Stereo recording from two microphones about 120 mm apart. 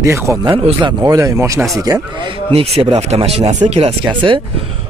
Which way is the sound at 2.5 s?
60° right (ahead or behind).